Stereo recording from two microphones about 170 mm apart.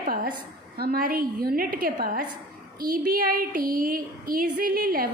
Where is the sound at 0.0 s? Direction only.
55° right (ahead or behind).